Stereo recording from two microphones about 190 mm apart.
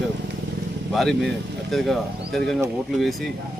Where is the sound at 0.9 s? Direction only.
Centre (ahead or behind).